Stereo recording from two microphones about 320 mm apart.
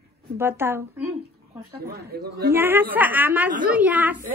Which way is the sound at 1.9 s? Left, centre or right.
Right.